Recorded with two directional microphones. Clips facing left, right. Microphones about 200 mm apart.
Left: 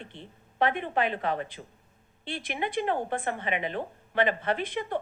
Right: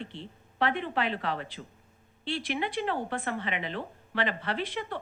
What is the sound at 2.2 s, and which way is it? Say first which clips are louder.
Speech: right 3 dB; 50° left (ahead or behind).